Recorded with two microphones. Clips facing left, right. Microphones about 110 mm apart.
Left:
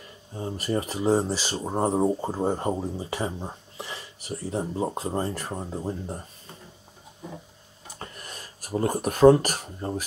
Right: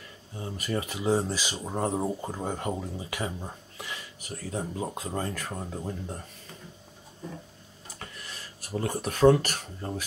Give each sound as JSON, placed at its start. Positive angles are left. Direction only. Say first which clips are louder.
{"t": 0.3, "sound": "speech", "louder": "left 4 dB", "side_deg": 30}
{"t": 1.6, "sound": "speech", "louder": "left 6 dB", "side_deg": 20}
{"t": 5.5, "sound": "speech", "louder": "left 4 dB", "side_deg": 15}
{"t": 8.0, "sound": "a sound", "louder": "left 3 dB", "side_deg": 40}
{"t": 9.4, "sound": "speech", "louder": "left 4 dB", "side_deg": 40}